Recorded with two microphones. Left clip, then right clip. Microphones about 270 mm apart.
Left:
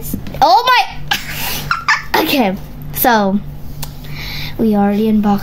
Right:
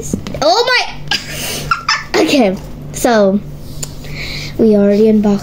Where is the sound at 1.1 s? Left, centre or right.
Centre.